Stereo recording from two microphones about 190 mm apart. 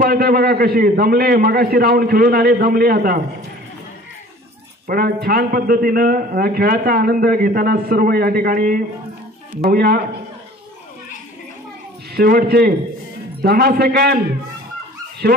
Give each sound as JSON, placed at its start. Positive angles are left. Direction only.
{"t": 0.0, "sound": "a man's voice", "side_deg": -50}
{"t": 4.8, "sound": "a man's voice", "side_deg": -55}
{"t": 12.1, "sound": "a man's voice", "side_deg": -55}
{"t": 15.2, "sound": "a man's voice", "side_deg": -60}